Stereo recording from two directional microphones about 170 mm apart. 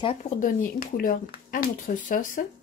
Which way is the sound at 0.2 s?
50° left (ahead or behind).